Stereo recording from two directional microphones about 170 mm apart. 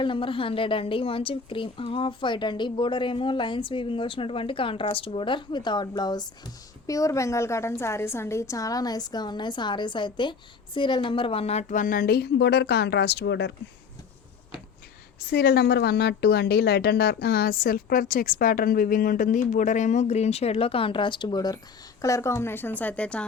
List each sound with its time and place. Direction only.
0.0 s a woman's voice: 30° left (ahead or behind); by 13.5 s 85° left
15.2 s a woman's voice: 70° left (ahead or behind); by 23.2 s 5° left (ahead or behind)